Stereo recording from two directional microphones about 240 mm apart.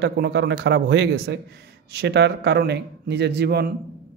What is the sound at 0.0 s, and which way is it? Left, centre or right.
A man's voice, right.